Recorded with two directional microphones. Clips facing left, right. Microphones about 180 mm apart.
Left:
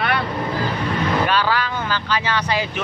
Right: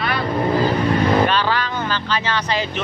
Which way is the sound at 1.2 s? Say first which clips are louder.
Even; 10° left (ahead or behind).